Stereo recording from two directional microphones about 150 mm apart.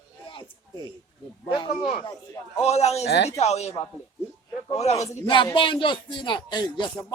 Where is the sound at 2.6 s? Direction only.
45° left (ahead or behind).